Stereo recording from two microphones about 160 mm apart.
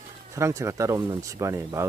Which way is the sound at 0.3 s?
20° right (ahead or behind).